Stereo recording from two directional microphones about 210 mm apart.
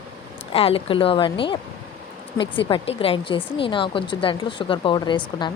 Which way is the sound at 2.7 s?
25° left (ahead or behind).